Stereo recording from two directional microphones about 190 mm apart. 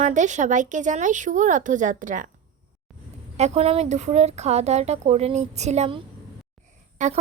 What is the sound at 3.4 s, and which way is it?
Speech, 35° right (ahead or behind).